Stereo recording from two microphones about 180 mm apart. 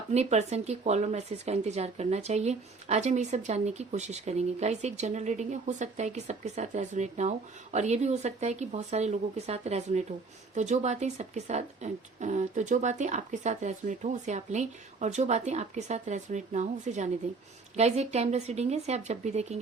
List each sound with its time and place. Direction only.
0.1 s speech: 40° right (ahead or behind)